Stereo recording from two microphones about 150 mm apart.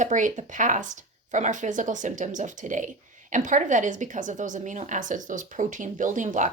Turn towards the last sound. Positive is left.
turn(degrees=-55)  # may be behind; listen again after turning